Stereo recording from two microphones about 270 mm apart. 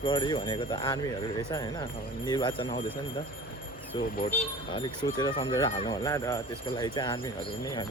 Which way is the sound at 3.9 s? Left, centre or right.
Centre.